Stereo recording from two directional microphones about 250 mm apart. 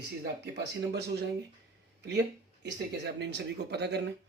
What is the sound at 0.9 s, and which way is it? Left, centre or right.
Speech, right.